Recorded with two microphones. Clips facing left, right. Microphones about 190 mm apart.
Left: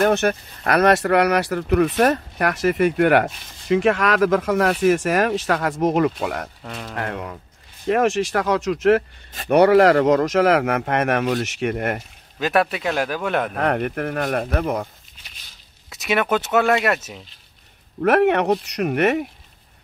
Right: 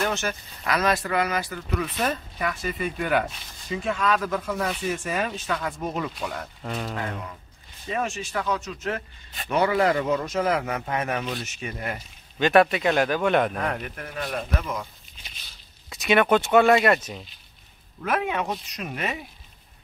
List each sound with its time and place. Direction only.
0.0 s speech: 60° left (ahead or behind); by 6.1 s 80° left
6.2 s speech: 65° left (ahead or behind)
6.6 s speech: centre (ahead or behind)
7.0 s speech: 75° left (ahead or behind)
9.5 s speech: 70° left (ahead or behind)
12.4 s speech: 5° left (ahead or behind)
13.6 s speech: 65° left (ahead or behind)
15.9 s speech: centre (ahead or behind)
18.0 s speech: 70° left (ahead or behind)